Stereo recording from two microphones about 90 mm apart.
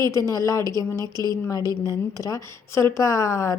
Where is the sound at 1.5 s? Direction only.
45° left (ahead or behind).